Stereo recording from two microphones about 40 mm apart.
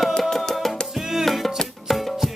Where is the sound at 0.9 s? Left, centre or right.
Centre.